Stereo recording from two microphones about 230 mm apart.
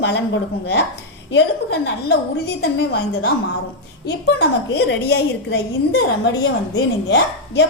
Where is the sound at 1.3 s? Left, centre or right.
Left.